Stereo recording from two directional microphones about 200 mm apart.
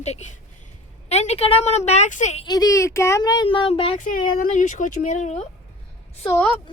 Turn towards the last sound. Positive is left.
turn(degrees=10)  # may be behind; listen again after turning